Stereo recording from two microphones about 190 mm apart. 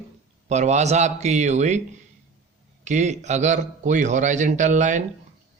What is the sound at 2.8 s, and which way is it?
A man's voice, 40° right (ahead or behind).